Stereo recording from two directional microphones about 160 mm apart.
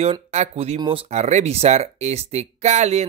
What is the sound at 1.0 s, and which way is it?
Speech, 45° right (ahead or behind).